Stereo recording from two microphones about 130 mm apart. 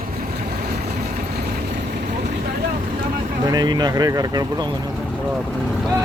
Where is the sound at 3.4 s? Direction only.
30° right (ahead or behind).